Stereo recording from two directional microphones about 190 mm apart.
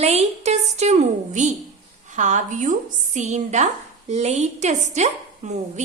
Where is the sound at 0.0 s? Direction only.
35° right (ahead or behind).